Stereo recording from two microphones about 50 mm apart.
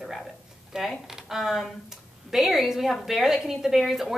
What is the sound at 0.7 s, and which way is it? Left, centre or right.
A woman's voice, centre.